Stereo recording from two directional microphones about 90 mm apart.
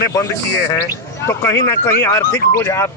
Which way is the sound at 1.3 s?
30° left (ahead or behind).